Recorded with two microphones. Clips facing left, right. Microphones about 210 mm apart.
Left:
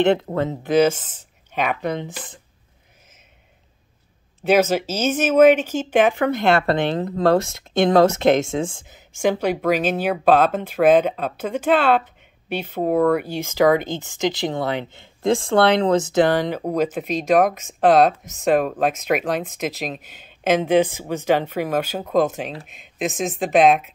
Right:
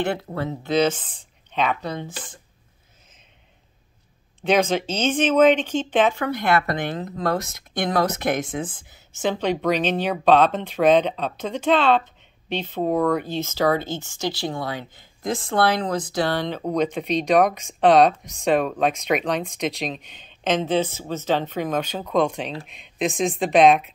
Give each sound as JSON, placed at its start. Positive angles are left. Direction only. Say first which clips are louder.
{"t": 0.4, "sound": "speech", "louder": "left 4 dB", "side_deg": 20}
{"t": 0.7, "sound": "speech", "louder": "left 4 dB", "side_deg": 10}
{"t": 4.4, "sound": "speech", "louder": "left 3 dB", "side_deg": 5}
{"t": 6.2, "sound": "speech", "louder": "left 4 dB", "side_deg": 25}
{"t": 16.3, "sound": "speech", "louder": "left 2 dB", "side_deg": 10}